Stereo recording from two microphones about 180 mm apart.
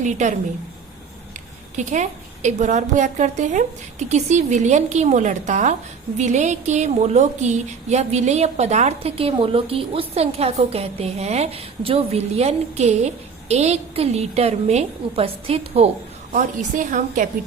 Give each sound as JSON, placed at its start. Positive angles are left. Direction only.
{"t": 0.0, "sound": "a woman's voice", "side_deg": -40}
{"t": 1.7, "sound": "a woman's voice", "side_deg": -40}
{"t": 16.3, "sound": "a woman's voice", "side_deg": -45}